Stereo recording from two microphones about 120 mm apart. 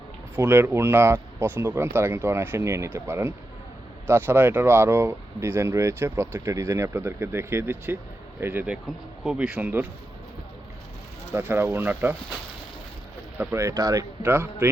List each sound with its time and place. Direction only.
0.3 s speech: 15° right (ahead or behind)
9.2 s speech: 5° right (ahead or behind)
11.3 s speech: 20° right (ahead or behind)
13.4 s speech: 20° right (ahead or behind)